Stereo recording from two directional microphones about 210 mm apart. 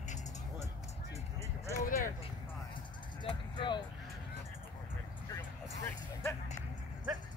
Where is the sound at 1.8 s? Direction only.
40° left (ahead or behind).